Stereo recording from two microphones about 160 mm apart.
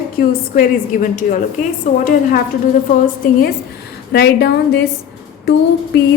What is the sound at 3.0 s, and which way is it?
Speech, 65° left (ahead or behind).